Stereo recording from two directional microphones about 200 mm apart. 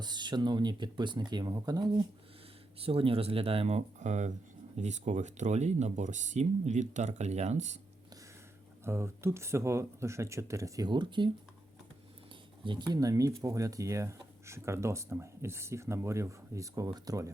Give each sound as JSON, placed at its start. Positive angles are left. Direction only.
{"t": 0.0, "sound": "speech", "side_deg": -20}
{"t": 8.8, "sound": "speech", "side_deg": -15}
{"t": 12.6, "sound": "speech", "side_deg": -20}